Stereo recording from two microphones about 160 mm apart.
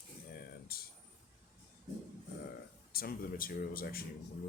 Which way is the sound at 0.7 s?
75° left (ahead or behind).